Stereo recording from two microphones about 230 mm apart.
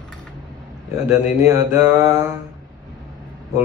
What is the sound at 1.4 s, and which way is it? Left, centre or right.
Mantra, centre.